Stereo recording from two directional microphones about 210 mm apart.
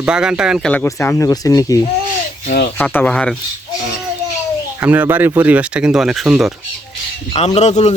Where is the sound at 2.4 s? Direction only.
50° left (ahead or behind).